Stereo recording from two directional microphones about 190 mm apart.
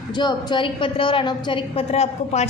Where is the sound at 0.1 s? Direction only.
20° left (ahead or behind).